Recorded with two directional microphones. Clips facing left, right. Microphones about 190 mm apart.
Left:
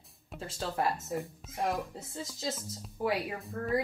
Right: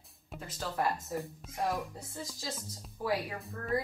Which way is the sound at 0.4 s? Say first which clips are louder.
Left 1 dB; 25° left (ahead or behind).